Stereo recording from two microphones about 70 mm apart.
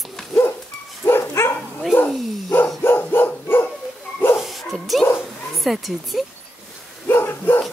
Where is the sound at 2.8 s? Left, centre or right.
Left.